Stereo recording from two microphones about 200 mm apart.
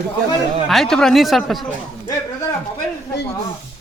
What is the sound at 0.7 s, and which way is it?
A woman's voice, centre (ahead or behind).